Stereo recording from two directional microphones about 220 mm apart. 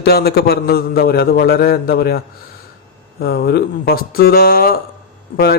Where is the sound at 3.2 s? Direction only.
45° left (ahead or behind).